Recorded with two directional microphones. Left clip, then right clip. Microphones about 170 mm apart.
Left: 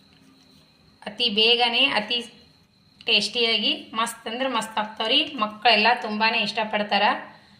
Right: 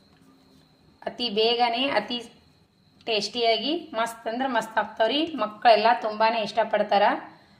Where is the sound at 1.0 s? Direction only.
65° right (ahead or behind).